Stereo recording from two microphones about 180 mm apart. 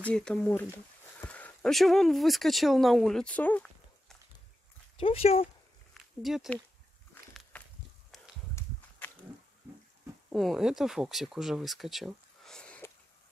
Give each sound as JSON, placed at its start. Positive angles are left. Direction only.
{"t": 0.0, "sound": "speech", "side_deg": 5}
{"t": 4.9, "sound": "speech", "side_deg": 30}
{"t": 5.9, "sound": "speech", "side_deg": 0}
{"t": 10.3, "sound": "speech", "side_deg": 0}